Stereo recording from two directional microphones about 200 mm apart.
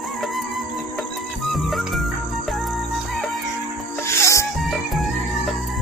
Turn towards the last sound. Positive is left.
turn(degrees=0)  # may be behind; listen again after turning